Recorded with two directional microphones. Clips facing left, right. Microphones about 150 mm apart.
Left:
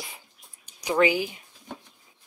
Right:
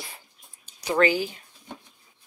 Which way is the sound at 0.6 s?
10° left (ahead or behind).